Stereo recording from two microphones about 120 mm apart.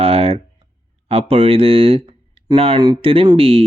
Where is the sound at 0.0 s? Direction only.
55° right (ahead or behind).